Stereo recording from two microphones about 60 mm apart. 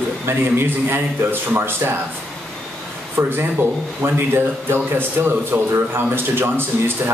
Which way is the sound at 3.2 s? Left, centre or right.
Right.